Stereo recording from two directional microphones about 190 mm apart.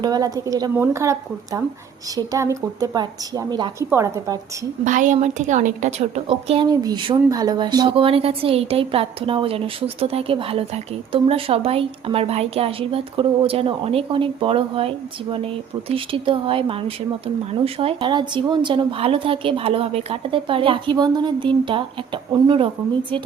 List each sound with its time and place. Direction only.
0.0 s a woman's voice: 20° right (ahead or behind)
4.9 s a woman's voice: 40° right (ahead or behind); by 23.2 s 25° right (ahead or behind)